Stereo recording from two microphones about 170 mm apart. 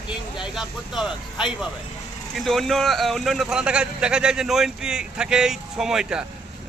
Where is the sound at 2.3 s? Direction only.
Centre (ahead or behind).